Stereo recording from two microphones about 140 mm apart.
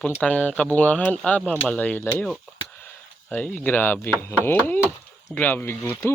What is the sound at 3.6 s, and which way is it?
Speech, 15° left (ahead or behind).